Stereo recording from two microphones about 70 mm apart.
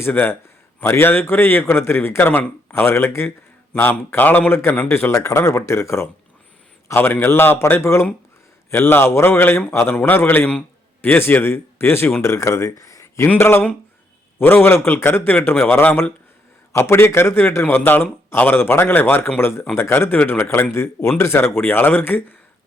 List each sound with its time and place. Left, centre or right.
0.8 s a man's voice: left
4.7 s a man's voice: left
4.9 s a man's voice: left
6.8 s a man's voice: left
7.8 s a man's voice: left
9.9 s a man's voice: left
10.2 s a man's voice: left
13.4 s a man's voice: left
16.7 s a man's voice: left